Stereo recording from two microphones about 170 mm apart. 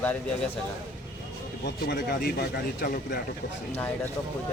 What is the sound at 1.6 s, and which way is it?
Speech, 70° left (ahead or behind).